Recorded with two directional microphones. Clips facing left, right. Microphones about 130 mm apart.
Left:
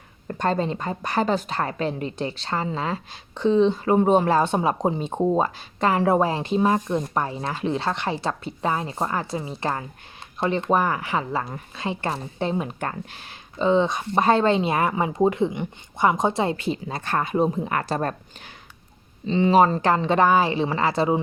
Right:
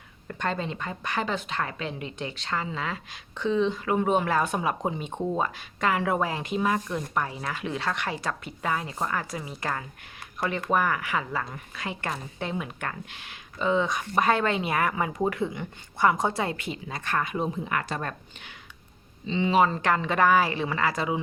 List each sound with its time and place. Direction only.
0.3 s a woman's voice: 35° left (ahead or behind)